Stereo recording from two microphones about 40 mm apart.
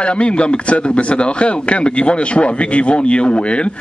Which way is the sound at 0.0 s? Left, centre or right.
Left.